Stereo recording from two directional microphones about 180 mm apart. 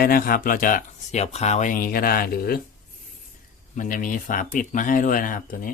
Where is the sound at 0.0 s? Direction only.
55° left (ahead or behind).